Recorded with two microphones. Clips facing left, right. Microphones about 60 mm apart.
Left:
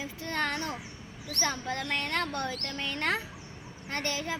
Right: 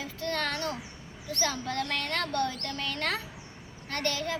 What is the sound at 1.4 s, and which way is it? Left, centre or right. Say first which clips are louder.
A woman's voice: right 1 dB; centre.